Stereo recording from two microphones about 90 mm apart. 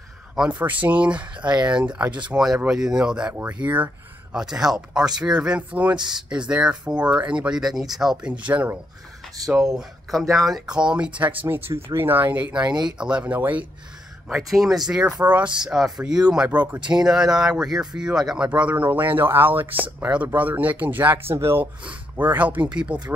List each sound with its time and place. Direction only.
0.4 s speech: 15° right (ahead or behind)
4.4 s speech: 5° right (ahead or behind)
8.3 s speech: 15° right (ahead or behind)
10.3 s speech: centre (ahead or behind); by 13.7 s 20° right (ahead or behind)
14.3 s speech: centre (ahead or behind)
16.4 s speech: 20° right (ahead or behind)
16.9 s speech: 5° right (ahead or behind)